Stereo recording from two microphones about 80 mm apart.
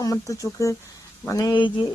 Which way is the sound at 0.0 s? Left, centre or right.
Left.